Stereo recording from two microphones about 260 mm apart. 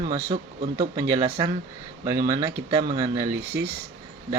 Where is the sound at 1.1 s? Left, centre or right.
Centre.